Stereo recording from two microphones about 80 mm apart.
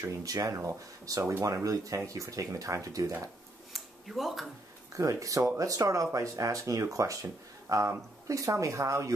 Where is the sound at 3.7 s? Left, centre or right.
Centre.